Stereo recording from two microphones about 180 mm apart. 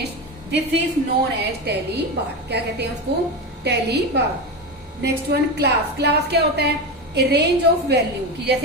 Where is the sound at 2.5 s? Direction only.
65° right (ahead or behind).